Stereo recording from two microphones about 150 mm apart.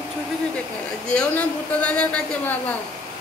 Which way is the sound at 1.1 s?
10° left (ahead or behind).